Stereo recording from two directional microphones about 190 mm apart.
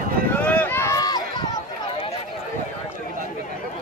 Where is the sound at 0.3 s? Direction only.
10° left (ahead or behind).